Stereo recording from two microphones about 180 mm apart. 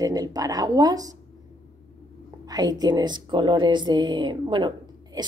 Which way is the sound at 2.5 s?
20° right (ahead or behind).